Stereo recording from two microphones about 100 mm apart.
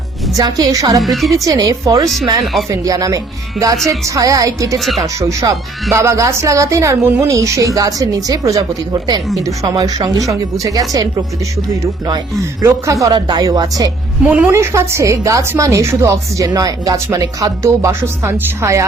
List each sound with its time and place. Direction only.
0.3 s a woman's voice: 40° right (ahead or behind)
1.0 s a woman's voice: centre (ahead or behind)
1.5 s a woman's voice: 35° right (ahead or behind)
2.4 s a woman's voice: centre (ahead or behind)
2.6 s a woman's voice: 35° right (ahead or behind)
12.6 s a woman's voice: 30° right (ahead or behind)
13.1 s a woman's voice: 45° right (ahead or behind)
14.3 s a woman's voice: 15° right (ahead or behind)
14.5 s a woman's voice: 30° right (ahead or behind)